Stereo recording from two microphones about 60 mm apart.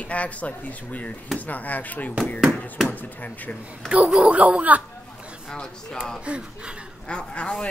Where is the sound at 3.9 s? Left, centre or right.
Centre.